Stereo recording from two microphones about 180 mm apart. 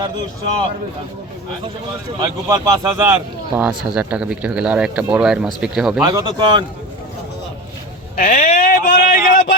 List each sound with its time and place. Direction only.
2.2 s a man's voice: 20° right (ahead or behind); by 6.0 s 5° right (ahead or behind)
6.0 s speech: 20° right (ahead or behind)
8.1 s speech: 50° left (ahead or behind)